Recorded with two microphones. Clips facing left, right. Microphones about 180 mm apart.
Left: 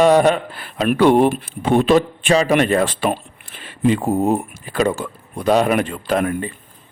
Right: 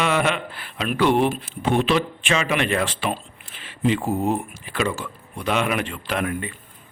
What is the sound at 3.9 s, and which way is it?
Speech, 55° left (ahead or behind).